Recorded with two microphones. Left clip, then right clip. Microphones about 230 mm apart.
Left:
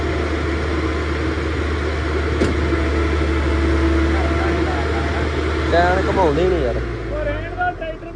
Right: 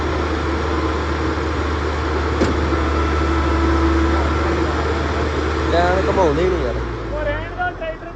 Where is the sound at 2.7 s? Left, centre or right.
Right.